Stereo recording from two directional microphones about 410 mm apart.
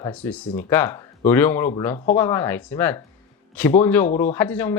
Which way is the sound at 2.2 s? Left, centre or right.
Centre.